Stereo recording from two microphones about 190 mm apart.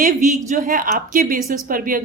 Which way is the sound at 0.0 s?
40° right (ahead or behind).